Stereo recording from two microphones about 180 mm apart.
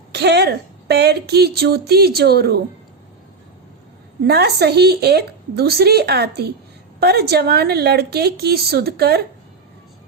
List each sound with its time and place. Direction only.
0.1 s speech: 65° right (ahead or behind)
4.3 s a woman's voice: 65° right (ahead or behind)